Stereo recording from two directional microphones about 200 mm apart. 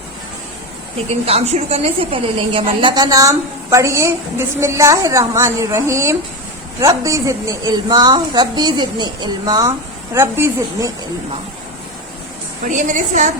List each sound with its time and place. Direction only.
1.2 s a woman's voice: 30° right (ahead or behind); by 10.9 s 15° right (ahead or behind)
12.6 s a woman's voice: 40° right (ahead or behind)